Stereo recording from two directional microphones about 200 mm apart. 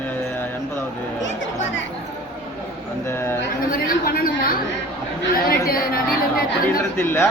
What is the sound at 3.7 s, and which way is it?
Speech, 45° left (ahead or behind).